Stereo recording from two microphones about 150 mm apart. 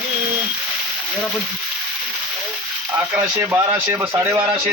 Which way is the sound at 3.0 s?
15° right (ahead or behind).